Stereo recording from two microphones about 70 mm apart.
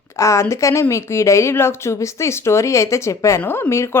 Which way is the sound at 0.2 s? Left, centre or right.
Left.